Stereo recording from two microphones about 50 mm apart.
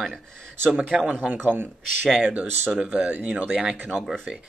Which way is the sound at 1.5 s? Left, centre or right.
Right.